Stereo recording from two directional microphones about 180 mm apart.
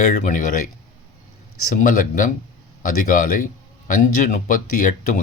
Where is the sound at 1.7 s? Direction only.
50° left (ahead or behind).